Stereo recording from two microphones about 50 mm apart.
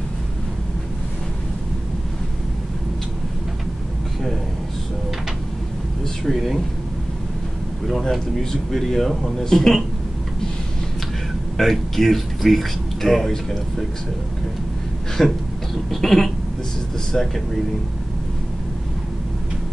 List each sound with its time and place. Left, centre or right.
6.2 s speech: centre
8.0 s speech: centre
11.5 s speech: centre
15.2 s speech: centre